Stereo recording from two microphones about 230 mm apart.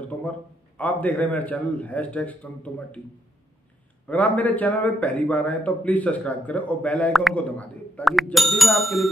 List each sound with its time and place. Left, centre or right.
0.7 s a man's voice: centre
4.1 s a man's voice: centre